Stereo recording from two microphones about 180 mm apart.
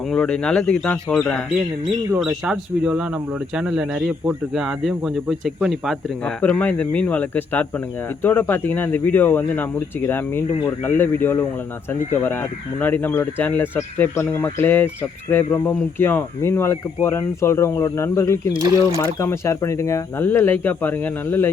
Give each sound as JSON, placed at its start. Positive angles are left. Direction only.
{"t": 0.1, "sound": "speech", "side_deg": 5}
{"t": 18.5, "sound": "speech", "side_deg": -20}
{"t": 18.9, "sound": "speech", "side_deg": 15}